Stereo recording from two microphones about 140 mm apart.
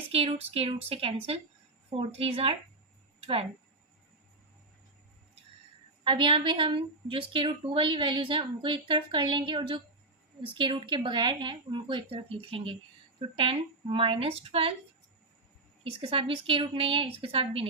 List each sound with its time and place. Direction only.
0.1 s a woman's voice: 45° right (ahead or behind)
6.1 s a woman's voice: 40° right (ahead or behind)
15.8 s a woman's voice: 40° right (ahead or behind)